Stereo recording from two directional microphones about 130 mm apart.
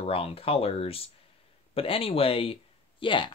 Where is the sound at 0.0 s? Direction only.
50° left (ahead or behind).